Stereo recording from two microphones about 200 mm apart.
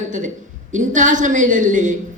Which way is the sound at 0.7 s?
40° right (ahead or behind).